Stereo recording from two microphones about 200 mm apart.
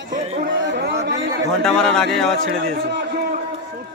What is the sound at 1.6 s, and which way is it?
Speech, 5° left (ahead or behind).